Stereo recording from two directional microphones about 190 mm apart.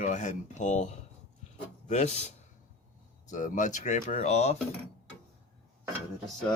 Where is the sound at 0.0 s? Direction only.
40° left (ahead or behind).